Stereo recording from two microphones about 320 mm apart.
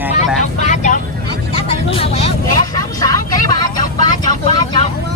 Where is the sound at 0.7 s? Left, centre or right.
Left.